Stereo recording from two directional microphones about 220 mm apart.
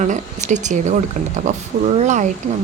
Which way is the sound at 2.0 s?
30° right (ahead or behind).